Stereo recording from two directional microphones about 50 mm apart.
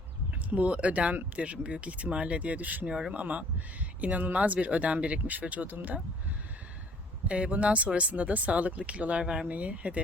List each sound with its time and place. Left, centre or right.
0.5 s speech: right
2.8 s speech: right
7.3 s speech: right
9.2 s speech: centre
9.5 s speech: right